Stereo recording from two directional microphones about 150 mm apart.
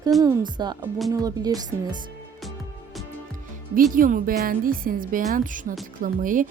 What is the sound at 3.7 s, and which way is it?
A woman's voice, 65° right (ahead or behind).